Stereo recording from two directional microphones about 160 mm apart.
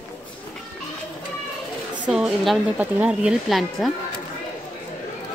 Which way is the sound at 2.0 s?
5° right (ahead or behind).